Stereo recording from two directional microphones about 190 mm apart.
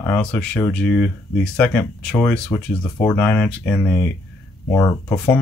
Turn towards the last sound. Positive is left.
turn(degrees=10)  # may be behind; listen again after turning